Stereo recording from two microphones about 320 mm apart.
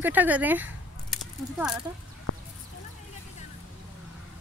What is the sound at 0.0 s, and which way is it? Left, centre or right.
Speech, centre.